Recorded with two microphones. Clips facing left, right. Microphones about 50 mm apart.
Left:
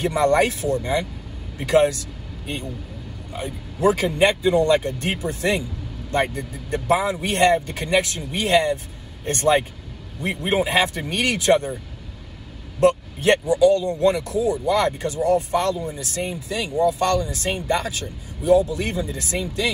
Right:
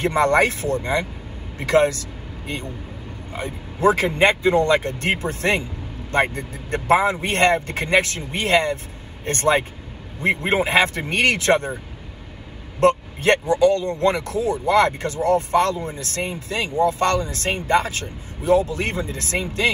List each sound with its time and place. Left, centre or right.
0.0 s speech: right
3.3 s speech: right
12.8 s speech: right